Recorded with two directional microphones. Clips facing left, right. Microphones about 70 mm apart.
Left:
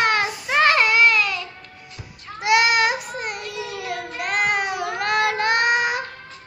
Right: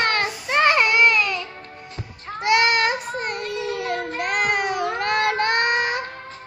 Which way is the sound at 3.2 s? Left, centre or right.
Centre.